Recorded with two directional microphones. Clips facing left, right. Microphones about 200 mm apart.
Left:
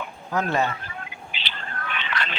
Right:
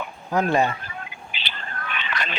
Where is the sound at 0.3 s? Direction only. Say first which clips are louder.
Right 3 dB; 15° right (ahead or behind).